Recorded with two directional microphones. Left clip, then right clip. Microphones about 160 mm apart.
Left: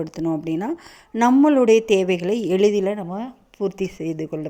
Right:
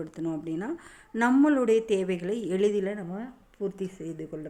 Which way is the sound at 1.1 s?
20° left (ahead or behind).